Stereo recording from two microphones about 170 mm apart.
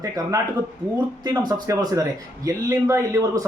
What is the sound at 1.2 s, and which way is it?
Speech, 25° right (ahead or behind).